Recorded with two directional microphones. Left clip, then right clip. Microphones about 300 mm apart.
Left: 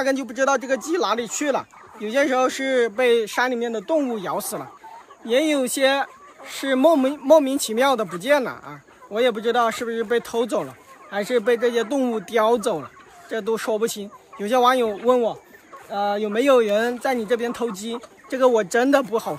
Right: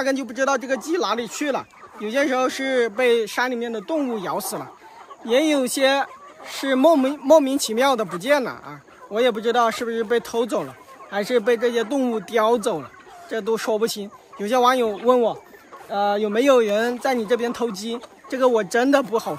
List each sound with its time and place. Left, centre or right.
0.0 s speech: centre